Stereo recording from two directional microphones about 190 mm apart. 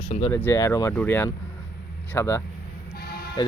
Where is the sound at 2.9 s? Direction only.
55° left (ahead or behind).